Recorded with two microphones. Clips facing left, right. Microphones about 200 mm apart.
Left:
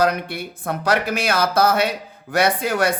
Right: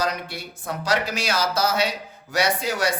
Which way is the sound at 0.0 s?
55° left (ahead or behind).